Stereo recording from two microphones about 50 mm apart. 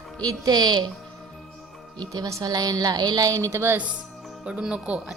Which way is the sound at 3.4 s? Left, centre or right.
Right.